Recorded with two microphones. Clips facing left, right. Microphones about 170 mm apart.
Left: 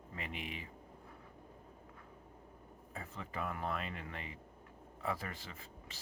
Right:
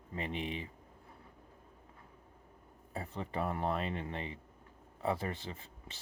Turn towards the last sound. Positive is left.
turn(degrees=-30)  # may be behind; listen again after turning